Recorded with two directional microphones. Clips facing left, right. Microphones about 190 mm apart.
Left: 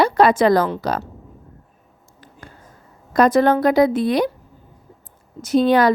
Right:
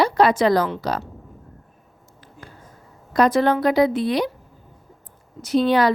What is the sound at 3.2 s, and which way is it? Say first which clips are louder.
Speech: left 3 dB; 45° left (ahead or behind).